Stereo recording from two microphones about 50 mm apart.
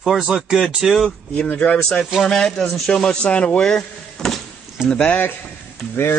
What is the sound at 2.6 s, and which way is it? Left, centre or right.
Speech, centre.